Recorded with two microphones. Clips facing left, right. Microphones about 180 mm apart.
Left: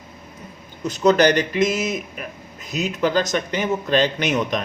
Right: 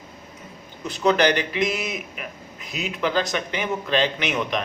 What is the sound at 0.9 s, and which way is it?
A man's voice, 40° left (ahead or behind).